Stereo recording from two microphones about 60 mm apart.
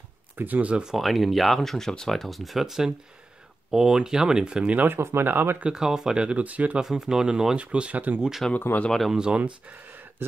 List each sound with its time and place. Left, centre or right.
0.4 s speech: right
0.8 s speech: centre
4.7 s speech: right
5.6 s speech: centre
6.8 s speech: centre; by 8.2 s right
8.4 s speech: centre
9.1 s speech: centre
9.4 s speech: right